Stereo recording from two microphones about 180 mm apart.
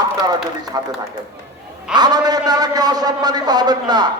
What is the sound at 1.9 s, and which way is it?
A man's voice, 25° right (ahead or behind).